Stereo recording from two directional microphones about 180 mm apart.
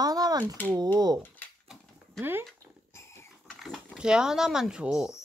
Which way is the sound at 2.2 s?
10° right (ahead or behind).